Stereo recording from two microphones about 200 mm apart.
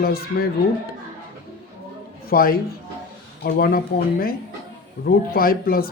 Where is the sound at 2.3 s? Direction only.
45° left (ahead or behind).